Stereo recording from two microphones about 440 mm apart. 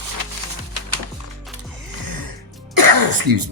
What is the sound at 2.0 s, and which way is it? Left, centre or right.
Music, right.